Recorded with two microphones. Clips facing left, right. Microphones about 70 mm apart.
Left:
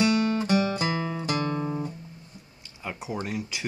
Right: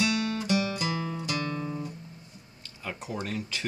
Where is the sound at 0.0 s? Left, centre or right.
Left.